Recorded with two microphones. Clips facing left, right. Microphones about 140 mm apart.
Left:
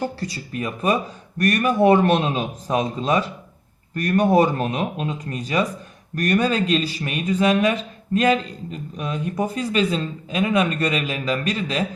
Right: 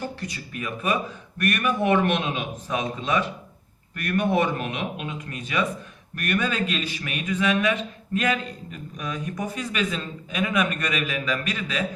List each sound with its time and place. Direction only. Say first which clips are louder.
0.0 s a man's voice: left 5 dB; 35° left (ahead or behind)